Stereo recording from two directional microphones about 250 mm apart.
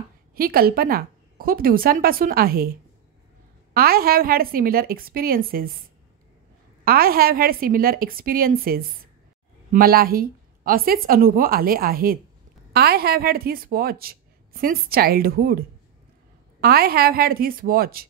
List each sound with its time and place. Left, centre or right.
0.4 s a woman's voice: right
3.7 s a woman's voice: right
6.8 s a woman's voice: right
16.6 s a woman's voice: right